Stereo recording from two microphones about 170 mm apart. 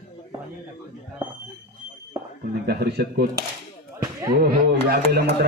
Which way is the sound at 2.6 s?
70° right (ahead or behind).